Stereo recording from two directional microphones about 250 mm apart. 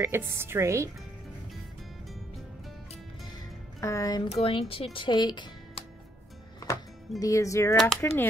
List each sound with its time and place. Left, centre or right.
0.0 s a woman's voice: centre
2.9 s music: centre
4.9 s speech: centre
7.2 s speech: centre